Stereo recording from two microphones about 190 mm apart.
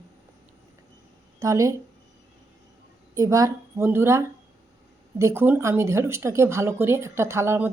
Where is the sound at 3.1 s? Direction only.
15° right (ahead or behind).